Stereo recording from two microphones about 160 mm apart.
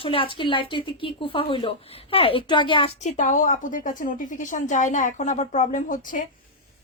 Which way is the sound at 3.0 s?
55° left (ahead or behind).